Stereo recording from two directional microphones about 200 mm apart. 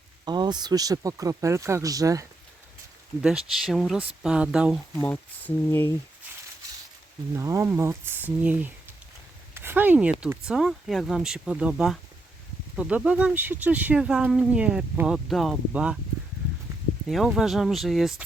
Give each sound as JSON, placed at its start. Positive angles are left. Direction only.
{"t": 0.3, "sound": "speech", "side_deg": -20}
{"t": 3.2, "sound": "speech", "side_deg": -5}
{"t": 4.9, "sound": "speech", "side_deg": 10}
{"t": 7.3, "sound": "speech", "side_deg": -15}
{"t": 17.1, "sound": "speech", "side_deg": 0}